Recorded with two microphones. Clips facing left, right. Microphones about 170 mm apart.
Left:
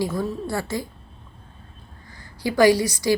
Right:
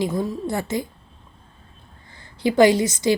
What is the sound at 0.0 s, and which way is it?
Speech, 20° right (ahead or behind).